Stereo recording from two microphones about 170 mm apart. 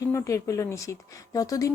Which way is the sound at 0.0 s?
15° left (ahead or behind).